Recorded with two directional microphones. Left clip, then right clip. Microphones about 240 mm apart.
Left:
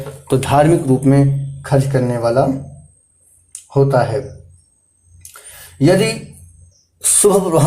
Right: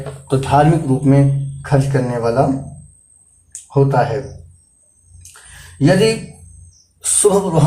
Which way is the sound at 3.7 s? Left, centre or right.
Left.